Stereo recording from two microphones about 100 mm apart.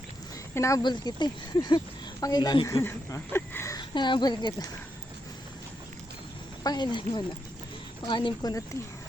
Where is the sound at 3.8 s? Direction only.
50° left (ahead or behind).